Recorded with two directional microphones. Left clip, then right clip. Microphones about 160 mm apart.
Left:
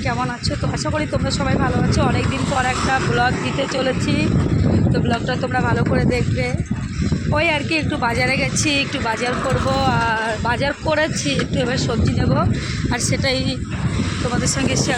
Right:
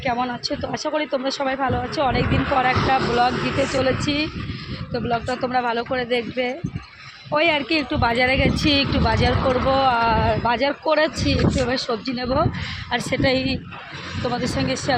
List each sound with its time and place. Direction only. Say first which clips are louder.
0.9 s a woman's voice: right 1 dB; 15° right (ahead or behind)
7.3 s a woman's voice: even; 15° right (ahead or behind)